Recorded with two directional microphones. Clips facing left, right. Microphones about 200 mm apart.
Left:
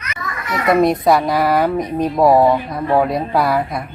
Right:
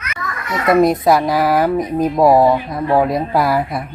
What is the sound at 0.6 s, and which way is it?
Speech, centre (ahead or behind).